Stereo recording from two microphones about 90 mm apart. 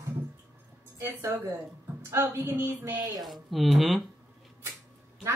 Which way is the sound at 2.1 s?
30° right (ahead or behind).